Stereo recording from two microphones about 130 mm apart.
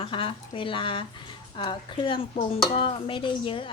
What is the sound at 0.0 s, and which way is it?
Speech, 40° left (ahead or behind).